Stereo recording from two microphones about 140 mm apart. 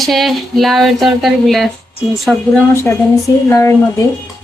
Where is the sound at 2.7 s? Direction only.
20° left (ahead or behind).